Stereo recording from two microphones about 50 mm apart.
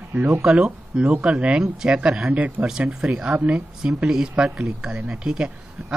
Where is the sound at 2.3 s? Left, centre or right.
Right.